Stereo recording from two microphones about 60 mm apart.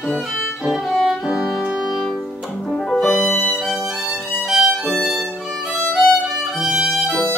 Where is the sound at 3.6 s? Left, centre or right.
Centre.